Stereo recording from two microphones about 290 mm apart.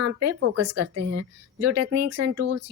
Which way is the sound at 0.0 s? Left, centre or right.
Right.